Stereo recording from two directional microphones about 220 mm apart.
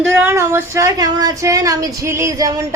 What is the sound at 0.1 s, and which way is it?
Speech, 10° right (ahead or behind).